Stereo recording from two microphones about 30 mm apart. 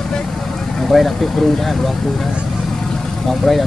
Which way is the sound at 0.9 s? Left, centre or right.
Centre.